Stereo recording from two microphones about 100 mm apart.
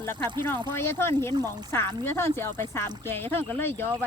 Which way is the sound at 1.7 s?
25° left (ahead or behind).